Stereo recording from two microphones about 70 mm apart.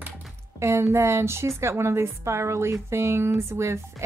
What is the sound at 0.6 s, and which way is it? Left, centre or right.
A woman's voice, right.